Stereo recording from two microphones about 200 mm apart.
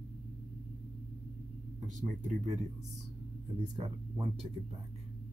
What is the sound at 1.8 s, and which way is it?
Speech, 40° right (ahead or behind).